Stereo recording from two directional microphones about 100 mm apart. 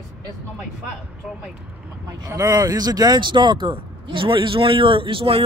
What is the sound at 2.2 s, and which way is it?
Speech, 35° right (ahead or behind).